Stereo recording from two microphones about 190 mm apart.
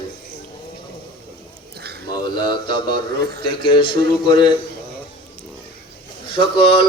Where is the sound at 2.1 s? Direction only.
20° left (ahead or behind).